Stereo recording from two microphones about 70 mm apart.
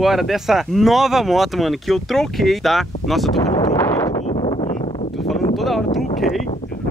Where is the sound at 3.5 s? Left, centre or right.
Left.